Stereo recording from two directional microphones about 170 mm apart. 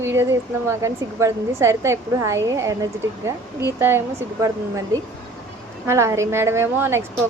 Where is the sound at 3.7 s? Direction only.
15° right (ahead or behind).